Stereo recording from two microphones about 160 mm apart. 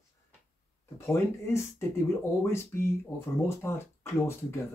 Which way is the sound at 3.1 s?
15° left (ahead or behind).